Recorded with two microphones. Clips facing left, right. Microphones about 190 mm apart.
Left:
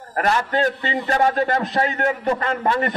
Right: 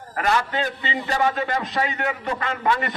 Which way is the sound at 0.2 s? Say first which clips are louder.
Left 3 dB; 50° left (ahead or behind).